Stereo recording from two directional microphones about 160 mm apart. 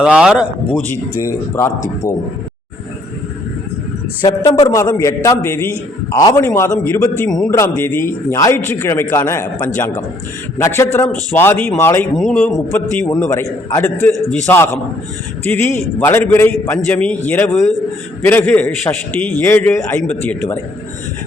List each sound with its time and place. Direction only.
0.0 s speech: 5° right (ahead or behind)
1.1 s a man's voice: 20° left (ahead or behind)
4.2 s a man's voice: 30° left (ahead or behind)
4.7 s a man's voice: 20° left (ahead or behind)
12.1 s speech: 5° left (ahead or behind)
12.5 s a man's voice: 15° left (ahead or behind)